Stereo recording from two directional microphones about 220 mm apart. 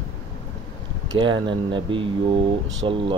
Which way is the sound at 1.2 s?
20° right (ahead or behind).